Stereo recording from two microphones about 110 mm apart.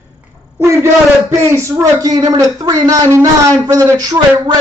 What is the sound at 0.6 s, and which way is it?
A man's voice, 25° right (ahead or behind).